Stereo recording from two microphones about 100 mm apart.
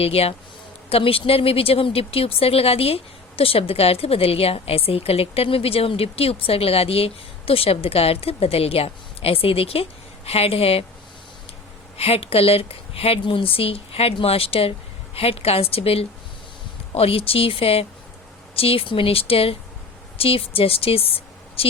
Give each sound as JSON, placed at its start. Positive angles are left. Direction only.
{"t": 0.0, "sound": "a woman's voice", "side_deg": 80}
{"t": 10.2, "sound": "a woman's voice", "side_deg": 90}
{"t": 11.9, "sound": "a woman's voice", "side_deg": 80}